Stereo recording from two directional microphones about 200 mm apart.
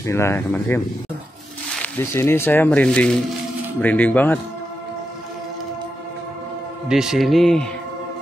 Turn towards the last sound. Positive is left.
turn(degrees=0)  # may be behind; listen again after turning